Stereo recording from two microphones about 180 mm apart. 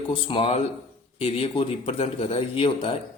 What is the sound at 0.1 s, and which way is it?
Speech, 30° left (ahead or behind).